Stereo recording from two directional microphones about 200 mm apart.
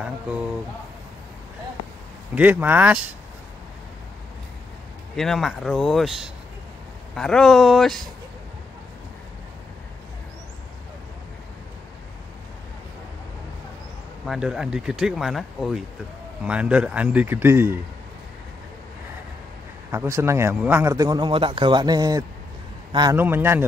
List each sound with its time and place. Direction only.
2.3 s a man's voice: 10° right (ahead or behind)
5.1 s speech: centre (ahead or behind)
14.2 s a man's voice: centre (ahead or behind)
19.9 s a man's voice: 15° right (ahead or behind)